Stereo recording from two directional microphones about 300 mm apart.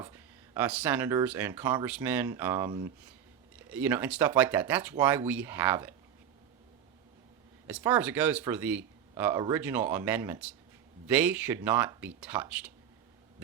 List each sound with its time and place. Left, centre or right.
0.0 s speech: centre
7.7 s speech: centre